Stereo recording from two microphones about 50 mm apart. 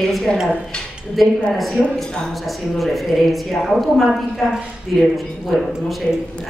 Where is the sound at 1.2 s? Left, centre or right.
Centre.